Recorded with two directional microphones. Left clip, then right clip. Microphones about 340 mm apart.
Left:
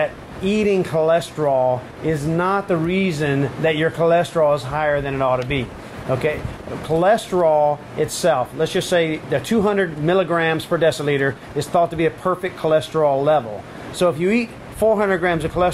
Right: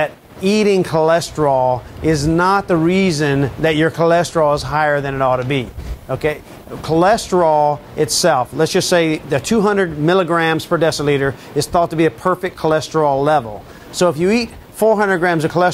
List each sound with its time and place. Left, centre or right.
0.0 s speech: right